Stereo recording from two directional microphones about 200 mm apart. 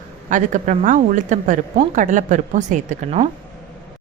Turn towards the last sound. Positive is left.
turn(degrees=-35)  # may be behind; listen again after turning